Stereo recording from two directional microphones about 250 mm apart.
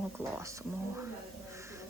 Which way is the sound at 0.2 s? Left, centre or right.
Centre.